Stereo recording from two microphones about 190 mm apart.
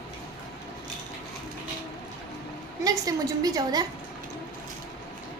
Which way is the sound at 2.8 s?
20° right (ahead or behind).